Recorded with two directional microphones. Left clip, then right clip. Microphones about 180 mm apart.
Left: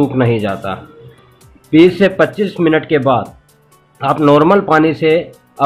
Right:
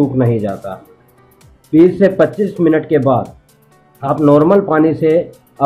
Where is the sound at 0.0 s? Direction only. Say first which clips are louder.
Left 1 dB; 20° left (ahead or behind).